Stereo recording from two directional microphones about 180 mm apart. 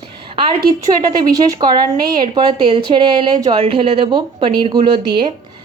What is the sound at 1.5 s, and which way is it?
A woman's voice, 25° right (ahead or behind).